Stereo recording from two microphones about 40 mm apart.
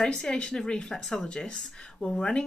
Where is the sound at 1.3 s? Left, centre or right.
Left.